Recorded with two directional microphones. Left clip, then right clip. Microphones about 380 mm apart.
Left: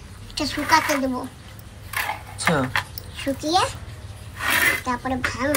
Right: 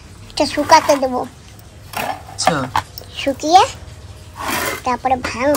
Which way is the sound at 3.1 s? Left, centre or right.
Right.